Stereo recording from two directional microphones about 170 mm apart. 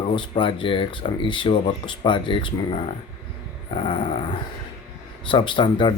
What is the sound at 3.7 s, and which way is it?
Dog, 30° left (ahead or behind).